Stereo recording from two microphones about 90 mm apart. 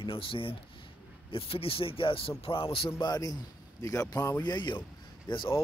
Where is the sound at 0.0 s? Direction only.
80° left.